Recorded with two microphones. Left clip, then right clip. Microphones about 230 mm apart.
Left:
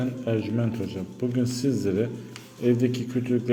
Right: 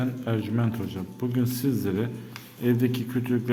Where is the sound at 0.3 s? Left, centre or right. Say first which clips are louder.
Left 4 dB; centre.